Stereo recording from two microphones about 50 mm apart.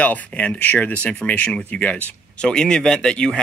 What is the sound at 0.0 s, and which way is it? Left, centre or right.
Speech, left.